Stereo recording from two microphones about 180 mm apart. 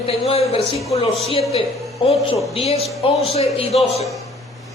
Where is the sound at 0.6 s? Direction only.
Centre (ahead or behind).